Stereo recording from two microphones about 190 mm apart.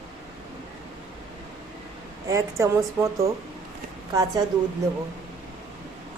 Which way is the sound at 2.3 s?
15° right (ahead or behind).